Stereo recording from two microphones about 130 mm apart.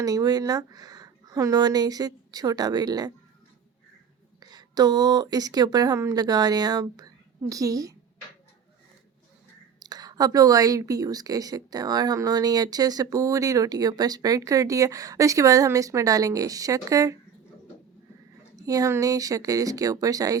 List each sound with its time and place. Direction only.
0.0 s a woman's voice: 30° right (ahead or behind)
4.4 s speech: 30° right (ahead or behind)
9.8 s a woman's voice: 30° right (ahead or behind)
18.5 s a woman's voice: 25° right (ahead or behind)